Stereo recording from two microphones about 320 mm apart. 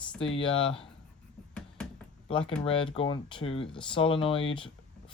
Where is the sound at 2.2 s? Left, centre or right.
Centre.